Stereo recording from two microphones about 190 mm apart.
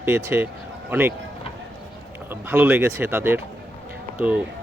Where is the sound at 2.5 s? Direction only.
10° right (ahead or behind).